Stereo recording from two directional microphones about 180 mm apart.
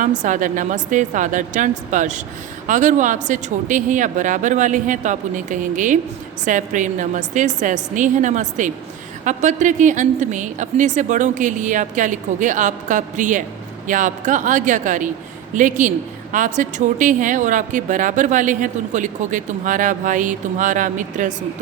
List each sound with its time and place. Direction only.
0.0 s a woman's voice: 45° right (ahead or behind)